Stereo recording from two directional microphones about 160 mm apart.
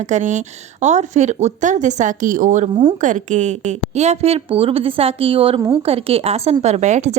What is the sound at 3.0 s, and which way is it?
A woman's voice, 50° right (ahead or behind).